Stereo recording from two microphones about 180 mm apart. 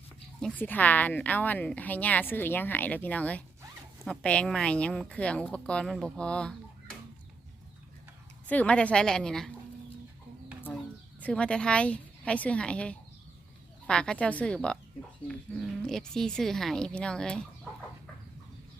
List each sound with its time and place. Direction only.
0.3 s a woman's voice: 5° left (ahead or behind)
8.4 s a woman's voice: 5° left (ahead or behind)
11.2 s a woman's voice: 5° left (ahead or behind)